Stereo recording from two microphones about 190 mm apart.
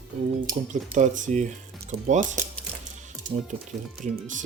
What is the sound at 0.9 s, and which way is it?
Speech, 40° right (ahead or behind).